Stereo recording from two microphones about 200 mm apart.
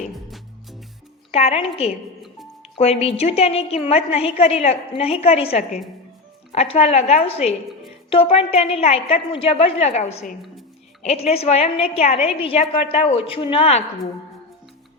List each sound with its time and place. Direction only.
0.3 s music: centre (ahead or behind)
1.3 s a woman's voice: 30° left (ahead or behind)